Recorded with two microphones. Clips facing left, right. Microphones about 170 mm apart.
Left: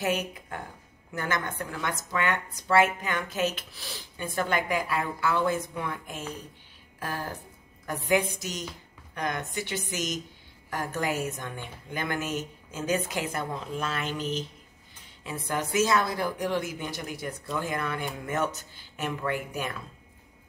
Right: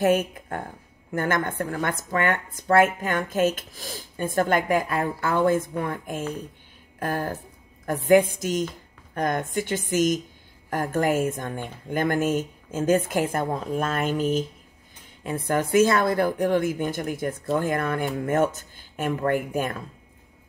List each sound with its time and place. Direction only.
0.0 s a woman's voice: 50° right (ahead or behind)